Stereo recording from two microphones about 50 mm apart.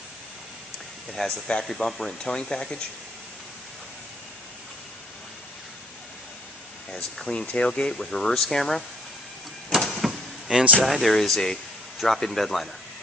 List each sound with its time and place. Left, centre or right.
1.2 s speech: centre
2.2 s speech: centre
6.9 s speech: centre
9.8 s vehicle: centre
10.8 s speech: centre